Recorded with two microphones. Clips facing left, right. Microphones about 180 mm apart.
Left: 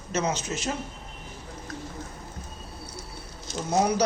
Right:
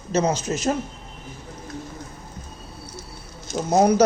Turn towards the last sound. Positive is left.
turn(degrees=-45)  # may be behind; listen again after turning